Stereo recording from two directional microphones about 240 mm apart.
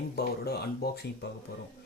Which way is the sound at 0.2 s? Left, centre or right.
Left.